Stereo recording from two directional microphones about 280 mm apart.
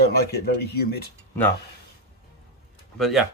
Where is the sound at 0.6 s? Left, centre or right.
Left.